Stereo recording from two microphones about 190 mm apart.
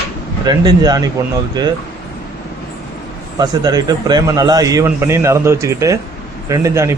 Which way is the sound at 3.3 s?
20° right (ahead or behind).